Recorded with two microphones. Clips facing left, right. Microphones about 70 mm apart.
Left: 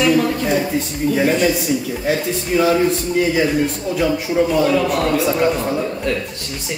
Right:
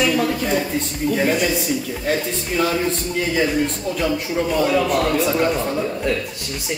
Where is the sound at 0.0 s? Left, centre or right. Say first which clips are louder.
Left 3 dB; centre.